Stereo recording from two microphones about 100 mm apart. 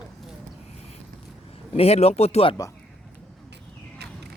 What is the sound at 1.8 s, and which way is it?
Speech, 90° left.